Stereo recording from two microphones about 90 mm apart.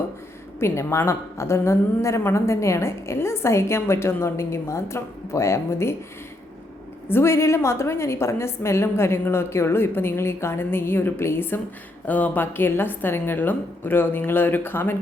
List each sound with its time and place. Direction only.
0.6 s a woman's voice: 30° left (ahead or behind)
7.1 s a woman's voice: 30° left (ahead or behind)